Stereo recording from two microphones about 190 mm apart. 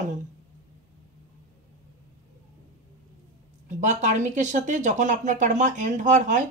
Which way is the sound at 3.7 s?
40° right (ahead or behind).